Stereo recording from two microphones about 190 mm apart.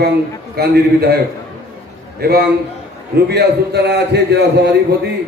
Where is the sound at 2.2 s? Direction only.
55° right (ahead or behind).